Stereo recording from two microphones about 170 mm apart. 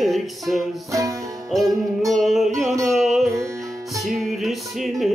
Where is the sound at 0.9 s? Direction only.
20° right (ahead or behind).